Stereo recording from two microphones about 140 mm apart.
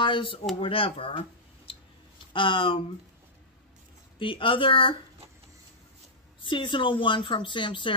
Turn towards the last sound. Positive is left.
turn(degrees=35)  # may be behind; listen again after turning